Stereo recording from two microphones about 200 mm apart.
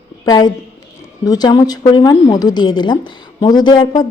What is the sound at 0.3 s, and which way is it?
A woman's voice, 20° left (ahead or behind).